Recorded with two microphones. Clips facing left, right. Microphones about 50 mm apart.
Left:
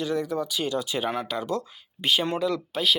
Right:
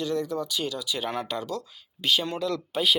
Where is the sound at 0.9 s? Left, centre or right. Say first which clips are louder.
Left 2 dB; centre.